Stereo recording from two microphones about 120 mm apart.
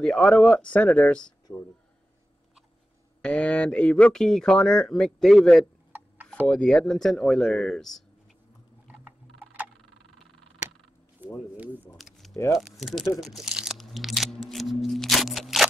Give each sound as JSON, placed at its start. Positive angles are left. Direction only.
{"t": 0.0, "sound": "speech", "side_deg": 5}
{"t": 3.2, "sound": "speech", "side_deg": 10}
{"t": 8.8, "sound": "tick-tock", "side_deg": -15}
{"t": 11.2, "sound": "a sound", "side_deg": -15}
{"t": 12.0, "sound": "a sound", "side_deg": 0}
{"t": 12.5, "sound": "speech", "side_deg": 0}
{"t": 14.5, "sound": "music", "side_deg": 0}